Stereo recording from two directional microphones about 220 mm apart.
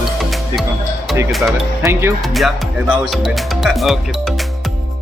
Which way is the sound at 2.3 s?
Centre (ahead or behind).